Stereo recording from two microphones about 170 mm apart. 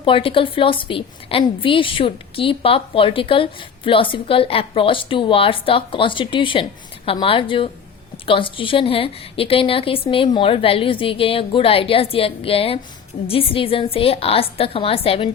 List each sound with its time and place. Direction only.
0.0 s a woman's voice: 30° left (ahead or behind)